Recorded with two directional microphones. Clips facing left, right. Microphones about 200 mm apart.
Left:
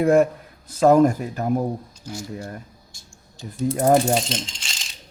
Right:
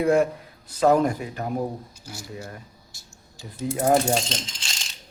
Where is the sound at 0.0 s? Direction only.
50° left (ahead or behind).